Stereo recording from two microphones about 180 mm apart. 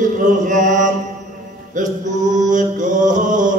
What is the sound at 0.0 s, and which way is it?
Chant, 45° right (ahead or behind).